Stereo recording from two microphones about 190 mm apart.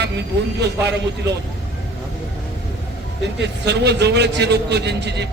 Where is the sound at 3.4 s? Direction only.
60° right (ahead or behind).